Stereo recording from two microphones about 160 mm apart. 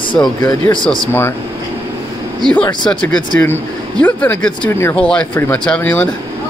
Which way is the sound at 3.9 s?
10° left (ahead or behind).